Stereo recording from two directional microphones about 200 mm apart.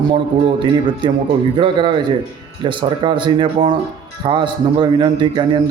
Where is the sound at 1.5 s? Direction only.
25° right (ahead or behind).